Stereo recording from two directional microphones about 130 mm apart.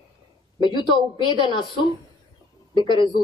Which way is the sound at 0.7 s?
35° left (ahead or behind).